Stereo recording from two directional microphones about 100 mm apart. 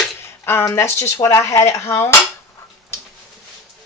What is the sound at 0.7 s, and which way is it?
Speech, 30° left (ahead or behind).